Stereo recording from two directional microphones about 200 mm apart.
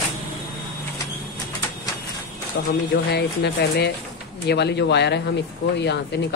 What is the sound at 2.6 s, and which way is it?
Speech, 60° left (ahead or behind).